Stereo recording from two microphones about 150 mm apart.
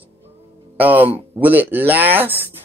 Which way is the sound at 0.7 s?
10° right (ahead or behind).